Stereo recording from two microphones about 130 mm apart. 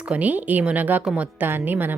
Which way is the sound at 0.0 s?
10° right (ahead or behind).